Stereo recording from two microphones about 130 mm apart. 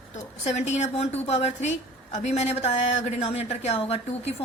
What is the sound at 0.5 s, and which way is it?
A woman's voice, 65° left (ahead or behind).